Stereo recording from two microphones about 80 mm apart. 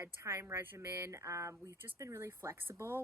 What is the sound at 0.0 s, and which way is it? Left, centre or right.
Speech, right.